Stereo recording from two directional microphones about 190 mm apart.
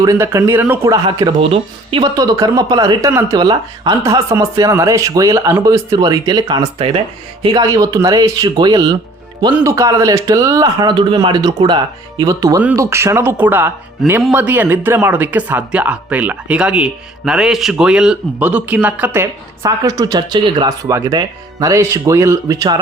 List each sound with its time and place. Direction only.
0.0 s speech: 15° right (ahead or behind)
1.0 s speech: 25° right (ahead or behind)